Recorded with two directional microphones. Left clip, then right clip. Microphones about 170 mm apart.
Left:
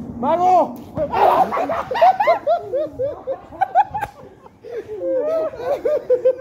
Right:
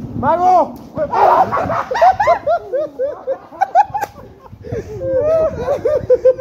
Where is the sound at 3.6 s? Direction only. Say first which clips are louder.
Right 4 dB; 55° right (ahead or behind).